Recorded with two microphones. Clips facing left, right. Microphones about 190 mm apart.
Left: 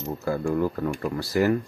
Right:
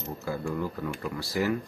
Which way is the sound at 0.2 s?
55° left (ahead or behind).